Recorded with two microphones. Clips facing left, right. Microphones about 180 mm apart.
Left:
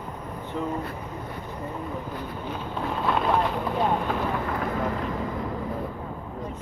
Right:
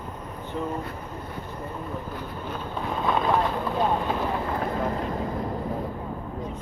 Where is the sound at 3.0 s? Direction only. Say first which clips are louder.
Right 1 dB; centre (ahead or behind).